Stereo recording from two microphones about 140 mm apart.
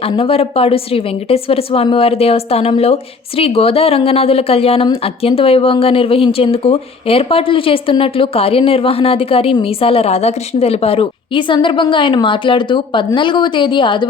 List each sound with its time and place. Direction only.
0.0 s a woman's voice: 45° left (ahead or behind)